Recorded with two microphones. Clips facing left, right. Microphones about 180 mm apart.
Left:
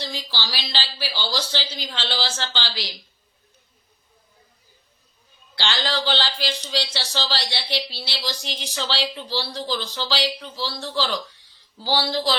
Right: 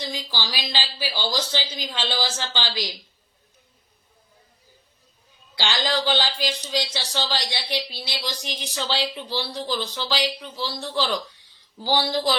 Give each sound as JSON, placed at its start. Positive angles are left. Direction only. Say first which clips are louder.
{"t": 0.0, "sound": "speech", "louder": "right 1 dB", "side_deg": -15}
{"t": 5.5, "sound": "speech", "louder": "right 1 dB", "side_deg": -15}